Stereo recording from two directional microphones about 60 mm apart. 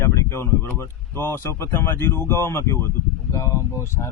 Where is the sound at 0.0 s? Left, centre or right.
Left.